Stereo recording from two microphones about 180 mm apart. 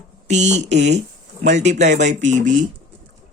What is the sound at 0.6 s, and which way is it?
Speech, 75° right (ahead or behind).